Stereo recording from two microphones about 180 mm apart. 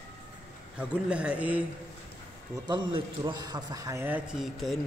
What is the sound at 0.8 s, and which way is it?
Speech, 5° right (ahead or behind).